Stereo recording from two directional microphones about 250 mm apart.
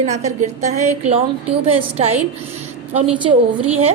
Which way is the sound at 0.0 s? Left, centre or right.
Right.